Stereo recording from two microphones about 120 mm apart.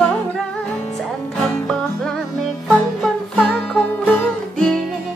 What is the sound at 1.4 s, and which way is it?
Music, 5° left (ahead or behind).